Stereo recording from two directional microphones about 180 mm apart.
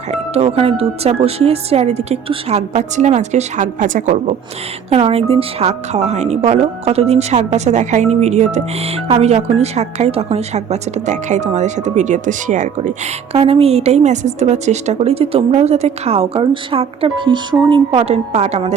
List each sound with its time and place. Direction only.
0.1 s speech: 35° right (ahead or behind)
13.3 s speech: 35° right (ahead or behind)